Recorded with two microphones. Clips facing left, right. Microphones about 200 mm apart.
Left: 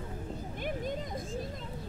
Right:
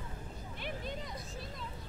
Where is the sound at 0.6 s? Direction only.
45° left (ahead or behind).